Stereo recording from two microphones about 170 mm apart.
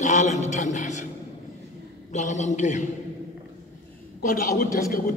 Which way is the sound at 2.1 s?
45° left (ahead or behind).